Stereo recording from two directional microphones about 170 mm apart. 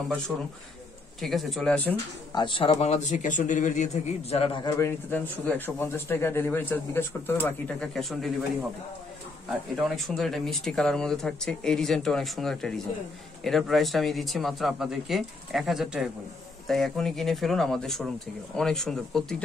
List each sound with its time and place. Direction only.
0.3 s speech: 5° right (ahead or behind)
2.3 s speech: 30° left (ahead or behind); by 8.3 s centre (ahead or behind)
9.5 s speech: centre (ahead or behind)